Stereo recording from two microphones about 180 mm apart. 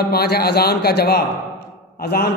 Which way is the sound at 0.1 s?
60° left (ahead or behind).